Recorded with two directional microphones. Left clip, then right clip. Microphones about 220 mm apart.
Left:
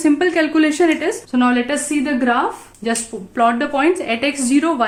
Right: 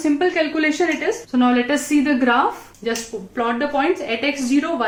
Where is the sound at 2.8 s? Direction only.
45° left (ahead or behind).